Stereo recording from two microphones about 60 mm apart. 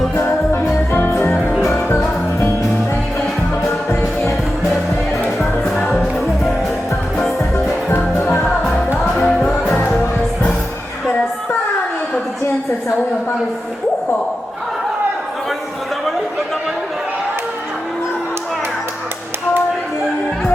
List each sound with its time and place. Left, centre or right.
0.2 s music: left
1.6 s music: left
7.9 s music: left
9.0 s music: centre